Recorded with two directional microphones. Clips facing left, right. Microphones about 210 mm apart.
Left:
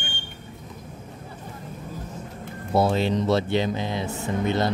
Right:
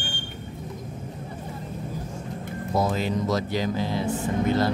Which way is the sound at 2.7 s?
30° left (ahead or behind).